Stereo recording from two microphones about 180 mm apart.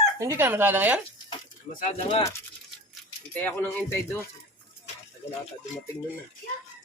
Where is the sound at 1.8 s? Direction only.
35° left (ahead or behind).